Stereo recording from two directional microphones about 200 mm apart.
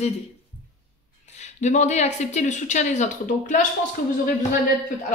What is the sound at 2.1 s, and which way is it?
A woman's voice, 35° left (ahead or behind).